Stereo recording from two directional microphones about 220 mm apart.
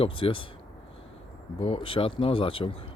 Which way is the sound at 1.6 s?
25° left (ahead or behind).